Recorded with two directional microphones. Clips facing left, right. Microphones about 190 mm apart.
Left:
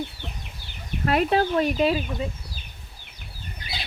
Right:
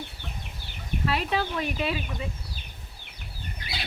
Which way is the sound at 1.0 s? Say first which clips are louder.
Left 7 dB; 50° left (ahead or behind).